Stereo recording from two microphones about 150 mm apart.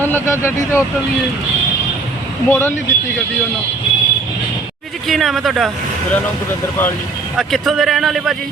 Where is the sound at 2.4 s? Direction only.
15° left (ahead or behind).